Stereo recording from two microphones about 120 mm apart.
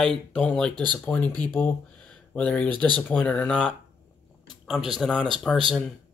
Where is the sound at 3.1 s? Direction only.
10° left (ahead or behind).